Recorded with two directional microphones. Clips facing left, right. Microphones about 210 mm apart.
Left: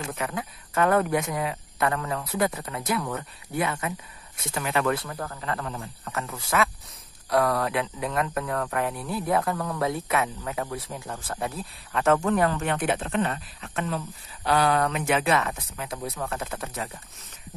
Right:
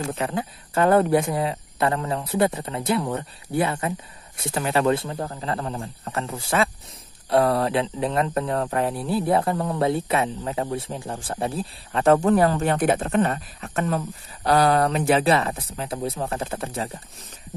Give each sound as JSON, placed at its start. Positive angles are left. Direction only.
{"t": 0.1, "sound": "a man's voice", "side_deg": -30}